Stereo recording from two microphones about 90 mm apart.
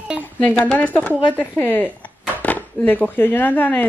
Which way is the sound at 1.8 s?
15° right (ahead or behind).